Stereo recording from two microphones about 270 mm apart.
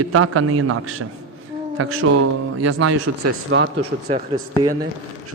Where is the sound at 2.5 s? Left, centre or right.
Right.